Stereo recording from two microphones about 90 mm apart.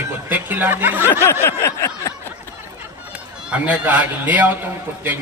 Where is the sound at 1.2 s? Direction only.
30° left (ahead or behind).